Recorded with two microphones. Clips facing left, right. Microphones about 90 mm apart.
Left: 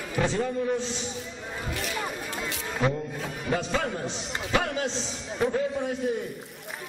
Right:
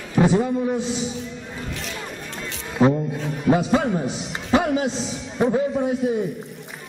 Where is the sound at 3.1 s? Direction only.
Centre (ahead or behind).